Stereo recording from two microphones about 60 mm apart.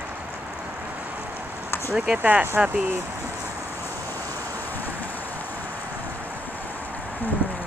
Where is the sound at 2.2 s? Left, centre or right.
Right.